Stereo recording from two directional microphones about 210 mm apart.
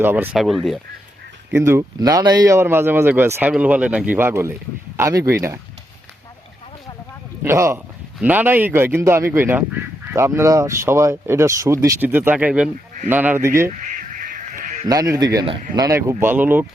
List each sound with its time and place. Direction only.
0.0 s speech: 10° right (ahead or behind)
1.5 s speech: 10° right (ahead or behind)
7.4 s speech: 10° right (ahead or behind)
13.7 s duck: 40° right (ahead or behind)
14.8 s speech: 15° right (ahead or behind)